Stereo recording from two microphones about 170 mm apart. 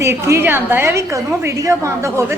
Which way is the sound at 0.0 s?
15° right (ahead or behind).